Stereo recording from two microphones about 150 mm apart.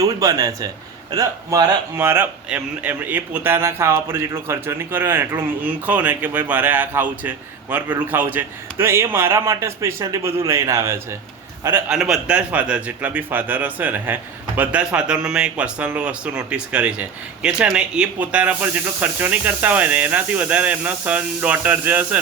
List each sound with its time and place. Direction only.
0.0 s speech: 25° right (ahead or behind)
11.9 s speech: 5° right (ahead or behind)